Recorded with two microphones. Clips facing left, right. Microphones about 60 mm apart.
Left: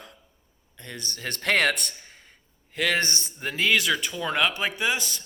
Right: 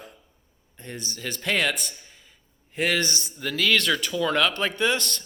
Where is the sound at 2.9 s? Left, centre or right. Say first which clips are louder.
Even; left.